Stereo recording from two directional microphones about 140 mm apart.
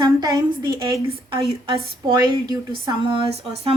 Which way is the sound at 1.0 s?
40° right (ahead or behind).